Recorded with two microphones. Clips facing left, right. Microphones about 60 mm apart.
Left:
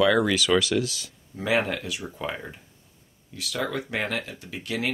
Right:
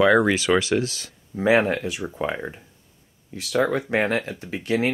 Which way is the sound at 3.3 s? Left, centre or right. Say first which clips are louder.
Right 8 dB; right.